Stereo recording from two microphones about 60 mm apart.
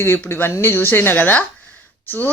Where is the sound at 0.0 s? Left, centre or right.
Left.